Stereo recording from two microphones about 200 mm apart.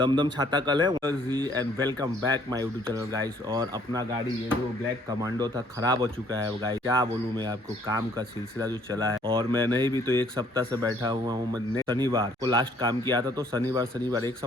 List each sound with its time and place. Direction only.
0.0 s speech: 20° right (ahead or behind)
5.4 s speech: 20° right (ahead or behind)
8.5 s speech: 15° right (ahead or behind)